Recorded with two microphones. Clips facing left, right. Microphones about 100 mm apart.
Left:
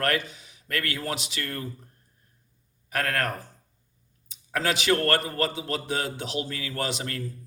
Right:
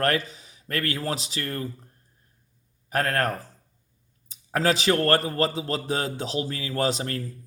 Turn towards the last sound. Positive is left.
turn(degrees=-35)  # may be behind; listen again after turning